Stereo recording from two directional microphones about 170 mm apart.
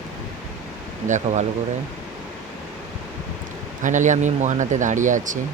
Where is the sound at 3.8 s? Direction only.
50° right (ahead or behind).